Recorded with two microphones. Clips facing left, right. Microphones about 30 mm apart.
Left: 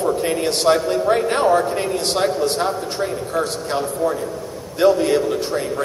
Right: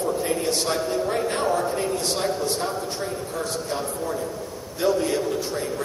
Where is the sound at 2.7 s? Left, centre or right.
Left.